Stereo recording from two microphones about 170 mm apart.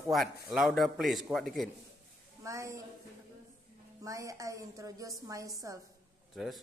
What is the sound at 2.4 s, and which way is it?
Speech, 20° right (ahead or behind).